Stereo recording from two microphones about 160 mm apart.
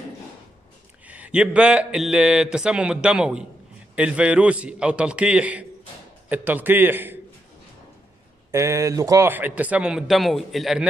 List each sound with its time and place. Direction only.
1.0 s a man's voice: 10° right (ahead or behind)
8.5 s a man's voice: 20° right (ahead or behind); by 10.9 s centre (ahead or behind)